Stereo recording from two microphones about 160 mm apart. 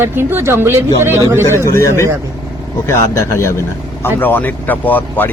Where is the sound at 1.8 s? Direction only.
20° left (ahead or behind).